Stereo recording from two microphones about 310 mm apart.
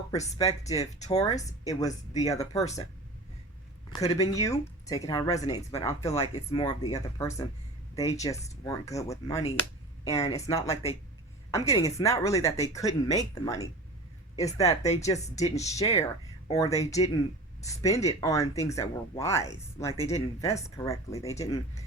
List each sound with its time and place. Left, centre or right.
0.2 s speech: centre
3.9 s speech: centre